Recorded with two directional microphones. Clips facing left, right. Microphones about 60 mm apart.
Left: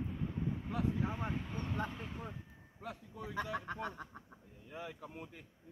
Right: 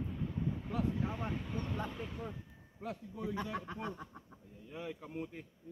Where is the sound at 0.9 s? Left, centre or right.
Centre.